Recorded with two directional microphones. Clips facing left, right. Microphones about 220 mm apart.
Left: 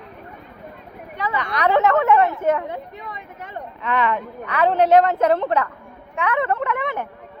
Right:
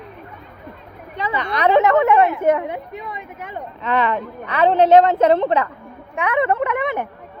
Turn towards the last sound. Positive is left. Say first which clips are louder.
# right 3 dB
turn(degrees=-15)  # may be behind; listen again after turning